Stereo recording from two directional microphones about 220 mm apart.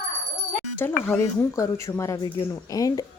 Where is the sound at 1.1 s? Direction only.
10° left (ahead or behind).